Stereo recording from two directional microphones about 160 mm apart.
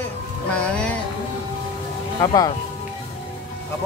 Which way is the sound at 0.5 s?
5° left (ahead or behind).